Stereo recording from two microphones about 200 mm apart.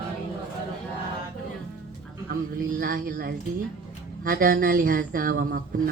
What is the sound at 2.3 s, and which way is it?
A woman's voice, 45° right (ahead or behind).